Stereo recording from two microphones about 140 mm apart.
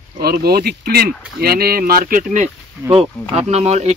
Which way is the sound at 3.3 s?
50° right (ahead or behind).